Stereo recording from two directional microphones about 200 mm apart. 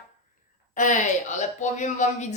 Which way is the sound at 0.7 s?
40° left (ahead or behind).